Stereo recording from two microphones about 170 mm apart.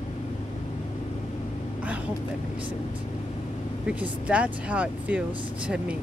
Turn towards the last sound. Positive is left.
turn(degrees=-5)  # may be behind; listen again after turning